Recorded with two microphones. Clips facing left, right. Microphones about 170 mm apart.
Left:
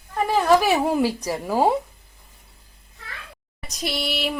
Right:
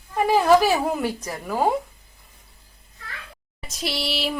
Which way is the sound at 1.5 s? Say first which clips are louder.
Left 2 dB; 15° left (ahead or behind).